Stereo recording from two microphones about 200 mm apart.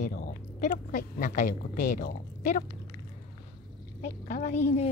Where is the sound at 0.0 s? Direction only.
40° left (ahead or behind).